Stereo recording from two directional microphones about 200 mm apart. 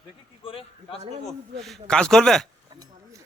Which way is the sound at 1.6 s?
5° left (ahead or behind).